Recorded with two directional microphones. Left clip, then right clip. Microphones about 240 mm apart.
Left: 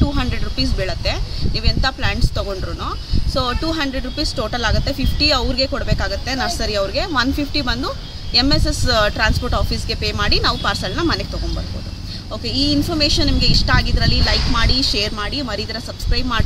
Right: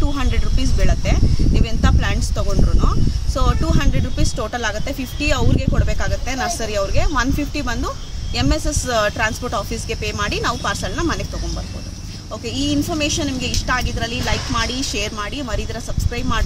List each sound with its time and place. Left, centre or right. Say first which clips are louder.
0.1 s a sound: left 2 dB; centre
3.3 s speech: left 2 dB; centre
12.4 s speech: left 3 dB; centre